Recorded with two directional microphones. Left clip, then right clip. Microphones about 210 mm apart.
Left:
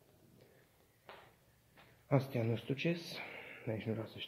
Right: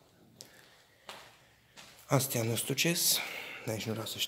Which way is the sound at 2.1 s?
15° right (ahead or behind).